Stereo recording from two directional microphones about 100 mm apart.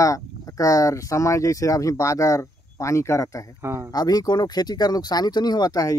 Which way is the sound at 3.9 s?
40° left (ahead or behind).